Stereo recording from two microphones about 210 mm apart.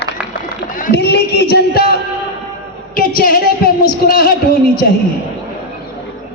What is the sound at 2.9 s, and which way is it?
A woman's voice, 45° left (ahead or behind).